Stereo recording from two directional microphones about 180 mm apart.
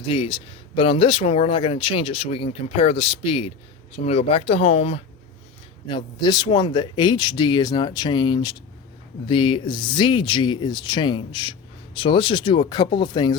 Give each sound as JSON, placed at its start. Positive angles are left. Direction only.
{"t": 0.1, "sound": "speech", "side_deg": 30}